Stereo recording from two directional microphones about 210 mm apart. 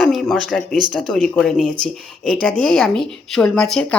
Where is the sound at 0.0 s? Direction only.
Centre (ahead or behind).